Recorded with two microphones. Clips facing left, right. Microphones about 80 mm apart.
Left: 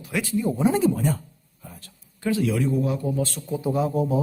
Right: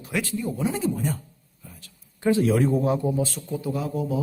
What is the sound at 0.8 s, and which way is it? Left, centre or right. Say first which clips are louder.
Speech: left 5 dB; left.